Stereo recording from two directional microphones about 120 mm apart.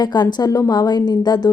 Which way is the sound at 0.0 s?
35° left (ahead or behind).